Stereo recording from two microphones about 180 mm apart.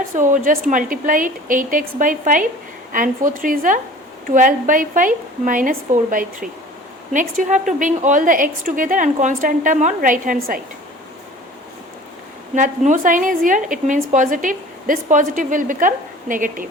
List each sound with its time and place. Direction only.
0.1 s a woman's voice: 45° right (ahead or behind)
12.5 s a woman's voice: 45° right (ahead or behind)